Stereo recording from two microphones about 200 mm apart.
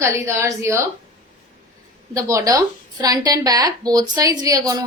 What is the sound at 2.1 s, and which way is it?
A woman's voice, 15° right (ahead or behind).